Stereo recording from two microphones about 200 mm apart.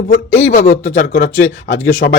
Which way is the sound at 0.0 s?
60° left (ahead or behind).